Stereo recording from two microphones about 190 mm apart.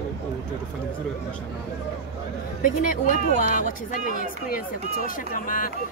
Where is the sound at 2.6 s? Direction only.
45° left (ahead or behind).